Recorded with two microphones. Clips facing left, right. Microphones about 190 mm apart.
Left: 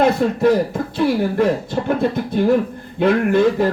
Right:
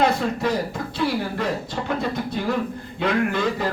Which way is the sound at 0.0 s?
55° left (ahead or behind).